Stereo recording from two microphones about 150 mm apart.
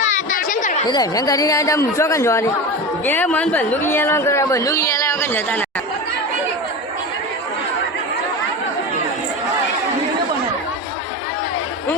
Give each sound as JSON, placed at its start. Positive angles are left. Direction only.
{"t": 0.0, "sound": "chatter", "side_deg": 65}
{"t": 0.9, "sound": "speech", "side_deg": 25}